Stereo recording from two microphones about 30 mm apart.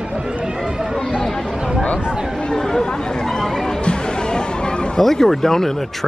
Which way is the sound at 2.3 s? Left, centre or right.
Left.